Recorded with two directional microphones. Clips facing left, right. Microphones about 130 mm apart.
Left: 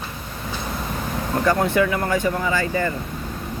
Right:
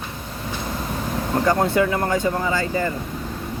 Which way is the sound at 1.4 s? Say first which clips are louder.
Even; 30° right (ahead or behind).